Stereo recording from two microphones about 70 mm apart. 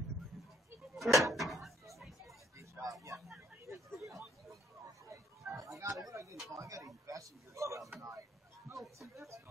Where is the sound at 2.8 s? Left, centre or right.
Right.